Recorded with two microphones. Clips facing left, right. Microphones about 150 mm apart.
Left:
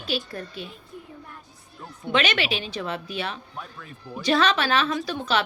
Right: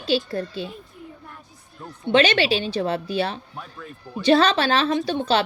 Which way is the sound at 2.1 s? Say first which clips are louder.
Right 6 dB; 30° right (ahead or behind).